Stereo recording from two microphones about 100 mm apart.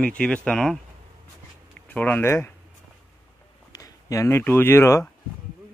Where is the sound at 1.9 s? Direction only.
15° left (ahead or behind).